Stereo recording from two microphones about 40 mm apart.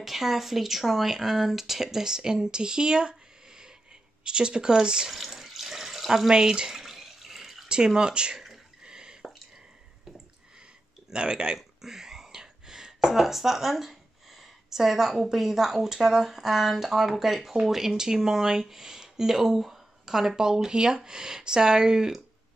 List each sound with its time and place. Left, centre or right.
0.0 s speech: centre
5.1 s water tap: centre
7.6 s speech: right
8.4 s a sound: centre
11.1 s speech: right